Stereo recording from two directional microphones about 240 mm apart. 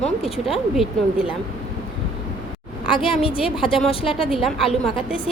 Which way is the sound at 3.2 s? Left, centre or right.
Left.